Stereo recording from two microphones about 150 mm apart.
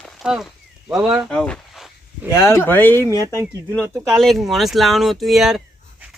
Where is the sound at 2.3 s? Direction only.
20° left (ahead or behind).